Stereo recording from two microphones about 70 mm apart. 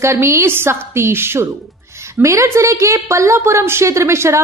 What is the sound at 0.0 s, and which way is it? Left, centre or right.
A woman's voice, right.